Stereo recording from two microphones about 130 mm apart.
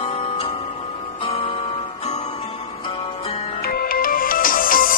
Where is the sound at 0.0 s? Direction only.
45° left (ahead or behind).